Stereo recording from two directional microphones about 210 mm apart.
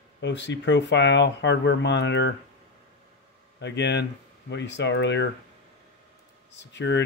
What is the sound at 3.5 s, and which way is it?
Speech, 55° left (ahead or behind).